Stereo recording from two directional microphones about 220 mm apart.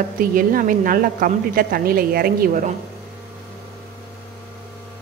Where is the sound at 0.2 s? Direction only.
40° right (ahead or behind).